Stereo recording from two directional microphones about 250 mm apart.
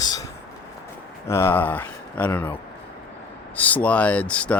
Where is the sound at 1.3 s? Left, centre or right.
Centre.